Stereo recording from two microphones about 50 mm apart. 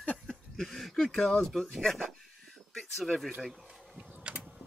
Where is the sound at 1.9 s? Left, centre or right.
Centre.